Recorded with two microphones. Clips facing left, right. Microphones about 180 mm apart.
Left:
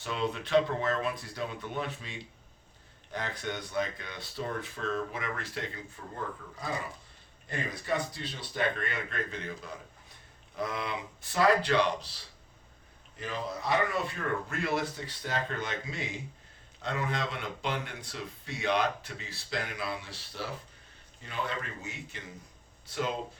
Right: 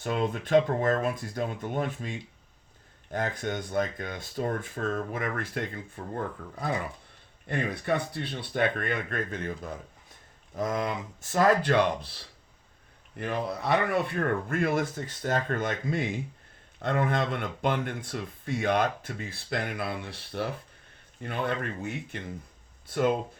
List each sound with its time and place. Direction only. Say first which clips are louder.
0.0 s speech: right 4 dB; 50° right (ahead or behind)